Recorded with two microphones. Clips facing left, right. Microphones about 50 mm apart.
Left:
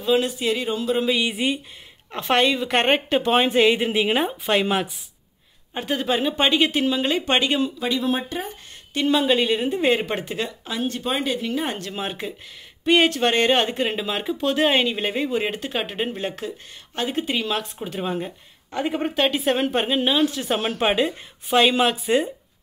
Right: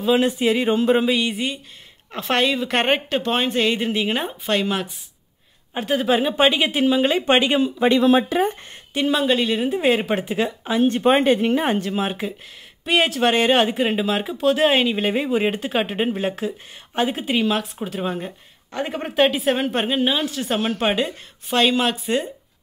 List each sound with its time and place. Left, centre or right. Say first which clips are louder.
0.2 s speech: right 5 dB; right
1.2 s speech: left 1 dB; centre
2.0 s speech: left 1 dB; centre
3.2 s speech: left 3 dB; centre
5.8 s speech: right 4 dB; centre
8.0 s speech: right 8 dB; right
8.9 s speech: even; centre
10.6 s speech: right 8 dB; right
11.0 s speech: right 10 dB; right
11.6 s speech: right 6 dB; centre